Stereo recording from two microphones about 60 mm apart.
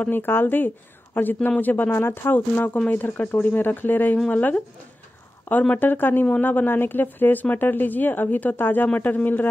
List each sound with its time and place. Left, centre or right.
0.0 s speech: left
5.8 s speech: left